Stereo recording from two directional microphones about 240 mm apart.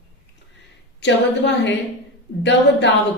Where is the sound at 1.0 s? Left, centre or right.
Left.